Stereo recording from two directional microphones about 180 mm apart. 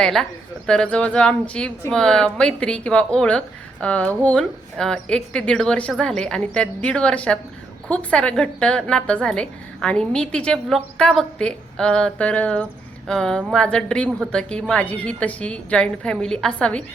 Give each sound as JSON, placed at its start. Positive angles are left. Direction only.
{"t": 0.0, "sound": "speech", "side_deg": 0}